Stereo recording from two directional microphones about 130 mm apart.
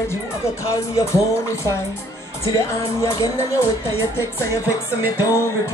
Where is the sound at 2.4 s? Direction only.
25° left (ahead or behind).